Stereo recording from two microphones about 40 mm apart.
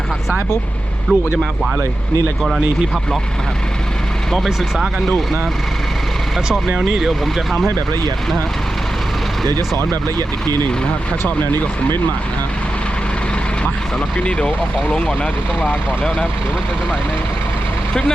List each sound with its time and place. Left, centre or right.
1.1 s speech: right
6.7 s speech: centre
11.2 s speech: left
14.3 s speech: left